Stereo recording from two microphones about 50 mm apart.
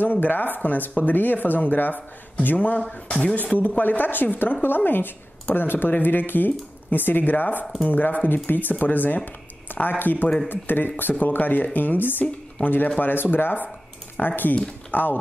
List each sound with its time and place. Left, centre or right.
0.0 s a woman's voice: left
2.8 s speech: centre
3.5 s a woman's voice: left